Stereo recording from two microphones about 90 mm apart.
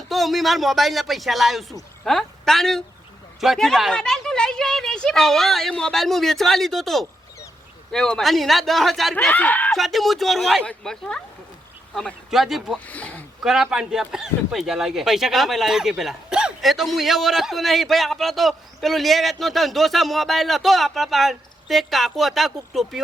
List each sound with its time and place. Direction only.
0.1 s a woman's voice: centre (ahead or behind)
9.3 s speech: 15° left (ahead or behind)
9.7 s speech: centre (ahead or behind)
12.8 s speech: 15° left (ahead or behind)
13.4 s speech: 5° right (ahead or behind)